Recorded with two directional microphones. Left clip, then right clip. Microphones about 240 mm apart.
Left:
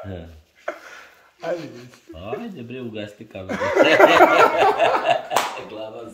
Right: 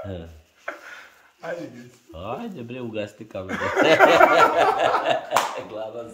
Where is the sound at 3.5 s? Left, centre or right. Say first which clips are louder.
Left 5 dB; left.